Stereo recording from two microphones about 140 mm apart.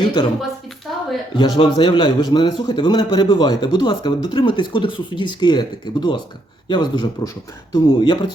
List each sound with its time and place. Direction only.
0.0 s a woman's voice: 30° left (ahead or behind)
0.9 s a sound: centre (ahead or behind)
1.4 s a man's voice: 35° left (ahead or behind)